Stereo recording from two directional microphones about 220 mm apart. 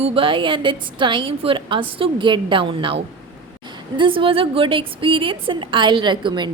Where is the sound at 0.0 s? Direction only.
25° right (ahead or behind).